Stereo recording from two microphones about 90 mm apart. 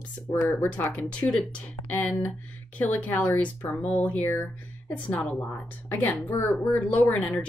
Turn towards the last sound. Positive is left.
turn(degrees=10)  # may be behind; listen again after turning